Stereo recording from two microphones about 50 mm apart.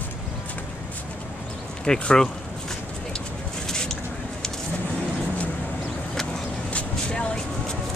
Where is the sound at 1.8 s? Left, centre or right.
Centre.